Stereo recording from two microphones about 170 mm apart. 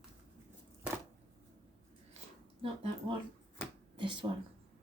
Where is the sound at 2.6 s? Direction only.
35° right (ahead or behind).